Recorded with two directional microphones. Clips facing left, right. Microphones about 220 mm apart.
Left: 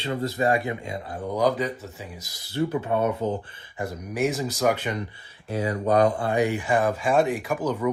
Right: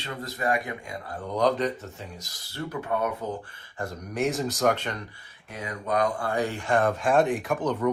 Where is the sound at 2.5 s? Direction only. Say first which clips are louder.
Left 6 dB; 25° left (ahead or behind).